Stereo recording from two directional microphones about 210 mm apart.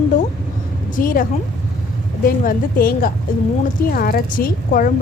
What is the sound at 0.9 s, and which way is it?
Speech, 40° left (ahead or behind).